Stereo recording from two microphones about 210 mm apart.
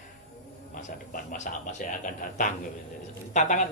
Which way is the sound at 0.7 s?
35° left (ahead or behind).